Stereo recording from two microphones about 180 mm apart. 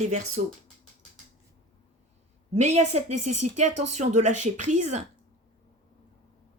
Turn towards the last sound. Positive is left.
turn(degrees=-40)  # may be behind; listen again after turning